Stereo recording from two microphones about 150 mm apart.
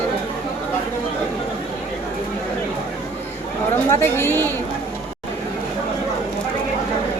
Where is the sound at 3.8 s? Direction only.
15° left (ahead or behind).